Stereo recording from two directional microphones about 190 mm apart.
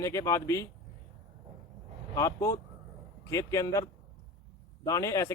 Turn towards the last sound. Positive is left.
turn(degrees=15)  # may be behind; listen again after turning